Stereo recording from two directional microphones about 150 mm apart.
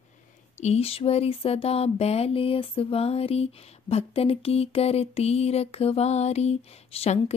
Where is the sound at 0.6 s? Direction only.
45° left (ahead or behind).